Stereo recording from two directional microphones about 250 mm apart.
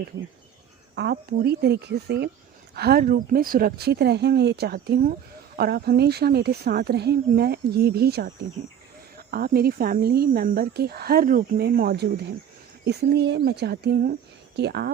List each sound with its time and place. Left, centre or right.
0.9 s speech: right